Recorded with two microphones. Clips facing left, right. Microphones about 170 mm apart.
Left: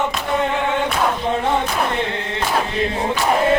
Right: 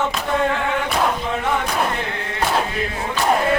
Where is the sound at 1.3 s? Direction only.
30° left (ahead or behind).